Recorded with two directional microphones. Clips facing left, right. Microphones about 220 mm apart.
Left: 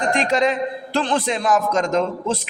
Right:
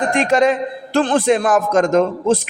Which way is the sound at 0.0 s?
50° right (ahead or behind).